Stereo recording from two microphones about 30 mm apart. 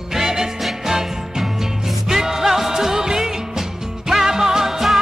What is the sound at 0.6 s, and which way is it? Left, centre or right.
Music, centre.